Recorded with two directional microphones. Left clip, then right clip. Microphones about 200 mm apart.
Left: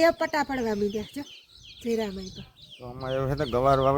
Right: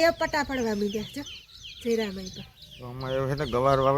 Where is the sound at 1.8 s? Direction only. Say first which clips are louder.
Right 1 dB; 65° left (ahead or behind).